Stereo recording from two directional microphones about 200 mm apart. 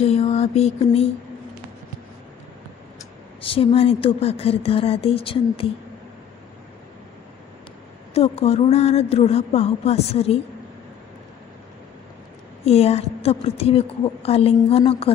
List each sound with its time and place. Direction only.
0.0 s a woman's voice: 30° left (ahead or behind)
3.4 s speech: 30° left (ahead or behind)
8.1 s a woman's voice: 30° left (ahead or behind)
12.6 s a woman's voice: 30° left (ahead or behind)